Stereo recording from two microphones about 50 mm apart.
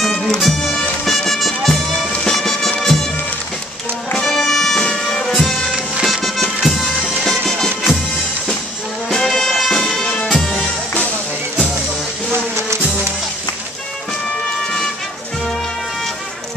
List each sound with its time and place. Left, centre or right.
0.0 s music: centre
4.2 s music: centre
4.7 s music: centre
5.4 s music: centre
9.1 s music: centre